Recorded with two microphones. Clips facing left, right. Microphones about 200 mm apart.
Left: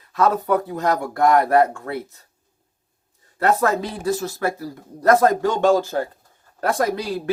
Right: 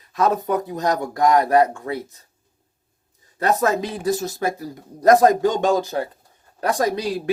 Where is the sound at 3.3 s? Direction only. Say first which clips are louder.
Left 1 dB; 20° right (ahead or behind).